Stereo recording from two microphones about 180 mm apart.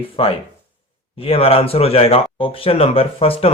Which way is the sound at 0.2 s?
30° left (ahead or behind).